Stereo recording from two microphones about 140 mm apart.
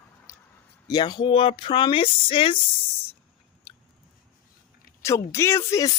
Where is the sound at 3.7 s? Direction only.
40° left (ahead or behind).